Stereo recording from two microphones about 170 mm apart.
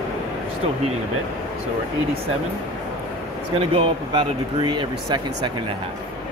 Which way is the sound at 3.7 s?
30° right (ahead or behind).